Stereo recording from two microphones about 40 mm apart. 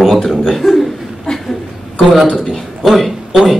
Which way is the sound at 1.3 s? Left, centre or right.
Left.